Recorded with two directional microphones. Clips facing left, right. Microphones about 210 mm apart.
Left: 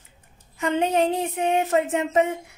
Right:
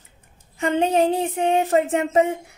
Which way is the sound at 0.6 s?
30° right (ahead or behind).